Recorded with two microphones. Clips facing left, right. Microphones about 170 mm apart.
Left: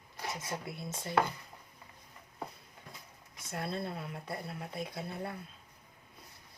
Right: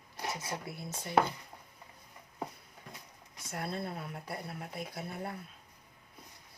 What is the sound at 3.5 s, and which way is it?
Speech, 25° left (ahead or behind).